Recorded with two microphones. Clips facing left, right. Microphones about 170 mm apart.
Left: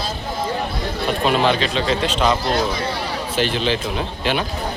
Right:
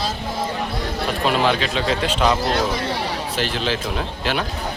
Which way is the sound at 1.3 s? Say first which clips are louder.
Left 1 dB; 5° right (ahead or behind).